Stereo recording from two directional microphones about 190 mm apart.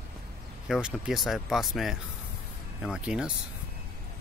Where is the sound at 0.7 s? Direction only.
5° right (ahead or behind).